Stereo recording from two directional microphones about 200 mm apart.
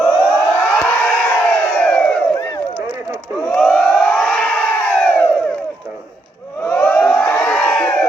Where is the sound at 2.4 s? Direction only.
20° left (ahead or behind).